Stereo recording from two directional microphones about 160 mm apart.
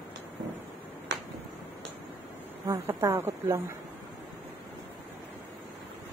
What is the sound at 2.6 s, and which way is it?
Speech, 20° right (ahead or behind).